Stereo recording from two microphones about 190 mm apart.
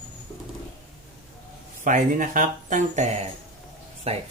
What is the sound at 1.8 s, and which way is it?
Speech, 45° right (ahead or behind).